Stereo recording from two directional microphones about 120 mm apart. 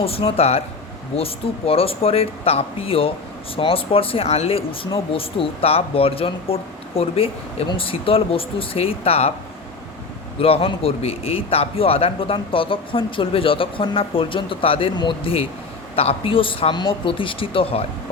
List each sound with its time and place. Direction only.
0.0 s a man's voice: 55° left (ahead or behind)
10.4 s a man's voice: 55° left (ahead or behind)